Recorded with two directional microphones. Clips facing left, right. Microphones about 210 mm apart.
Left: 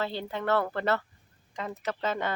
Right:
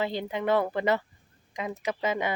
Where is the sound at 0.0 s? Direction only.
15° right (ahead or behind).